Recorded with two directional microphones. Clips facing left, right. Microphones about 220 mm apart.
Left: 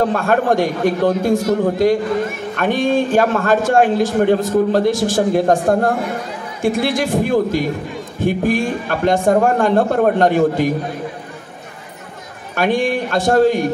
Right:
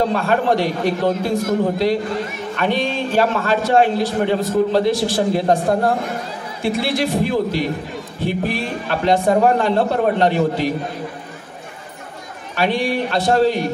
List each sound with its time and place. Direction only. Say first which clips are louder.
0.0 s a man's voice: left 2 dB; 50° left (ahead or behind)
12.5 s a man's voice: left 2 dB; 50° left (ahead or behind)